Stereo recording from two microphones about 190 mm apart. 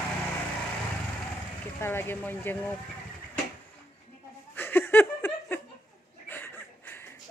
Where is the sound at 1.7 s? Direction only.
10° left (ahead or behind).